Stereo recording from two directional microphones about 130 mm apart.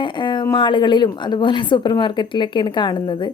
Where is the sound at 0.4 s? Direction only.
35° left (ahead or behind).